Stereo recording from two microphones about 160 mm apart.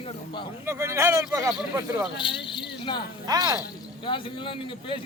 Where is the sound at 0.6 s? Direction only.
15° right (ahead or behind).